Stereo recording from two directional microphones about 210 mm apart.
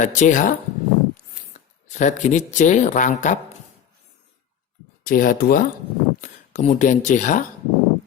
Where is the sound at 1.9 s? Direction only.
35° left (ahead or behind).